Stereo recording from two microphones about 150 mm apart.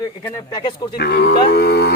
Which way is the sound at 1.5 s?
90° left.